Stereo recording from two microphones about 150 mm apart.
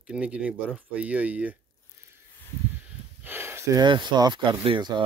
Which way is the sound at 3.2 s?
15° right (ahead or behind).